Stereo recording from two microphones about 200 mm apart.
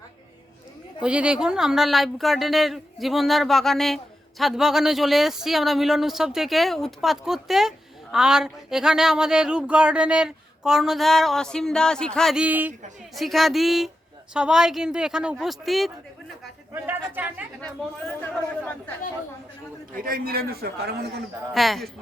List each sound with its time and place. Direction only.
1.0 s speech: 5° right (ahead or behind)
17.6 s speech: 5° left (ahead or behind)
20.0 s a man's voice: 45° right (ahead or behind)
21.5 s speech: centre (ahead or behind)